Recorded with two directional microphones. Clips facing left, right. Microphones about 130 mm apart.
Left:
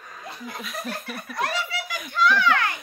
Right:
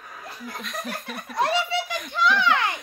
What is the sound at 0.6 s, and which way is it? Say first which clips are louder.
Speech: even; 5° left (ahead or behind).